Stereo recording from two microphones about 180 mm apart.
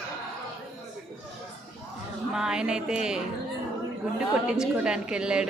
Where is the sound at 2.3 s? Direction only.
5° right (ahead or behind).